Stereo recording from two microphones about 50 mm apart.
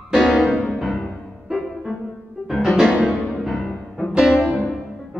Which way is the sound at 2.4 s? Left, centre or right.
Centre.